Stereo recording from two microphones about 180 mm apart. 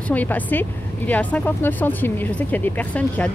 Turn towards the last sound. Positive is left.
turn(degrees=10)  # may be behind; listen again after turning